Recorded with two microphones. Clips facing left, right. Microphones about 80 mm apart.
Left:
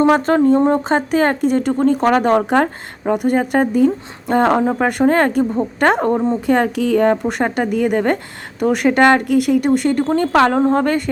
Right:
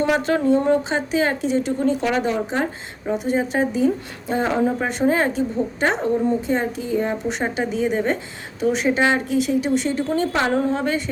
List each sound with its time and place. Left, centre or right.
0.0 s speech: left
6.5 s speech: left